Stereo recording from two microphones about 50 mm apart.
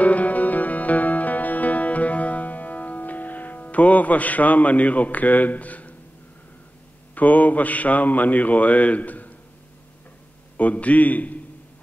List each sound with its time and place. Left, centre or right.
0.0 s music: left
7.2 s speech: left
10.6 s speech: left